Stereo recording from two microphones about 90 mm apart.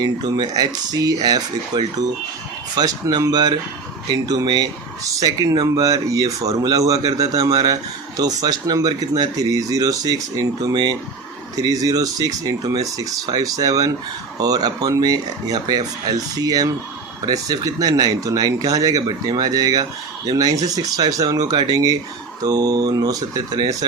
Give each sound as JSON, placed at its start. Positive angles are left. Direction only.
{"t": 0.0, "sound": "speech", "side_deg": -50}